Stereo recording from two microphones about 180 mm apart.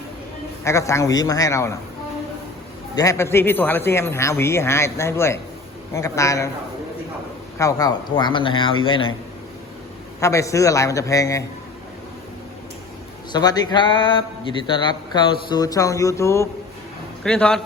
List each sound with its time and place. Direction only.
0.6 s a man's voice: 15° left (ahead or behind)
2.9 s a man's voice: 20° left (ahead or behind)
7.6 s speech: 20° left (ahead or behind)
10.2 s a man's voice: 15° left (ahead or behind)
13.3 s speech: 20° left (ahead or behind)
17.2 s a man's voice: 5° left (ahead or behind)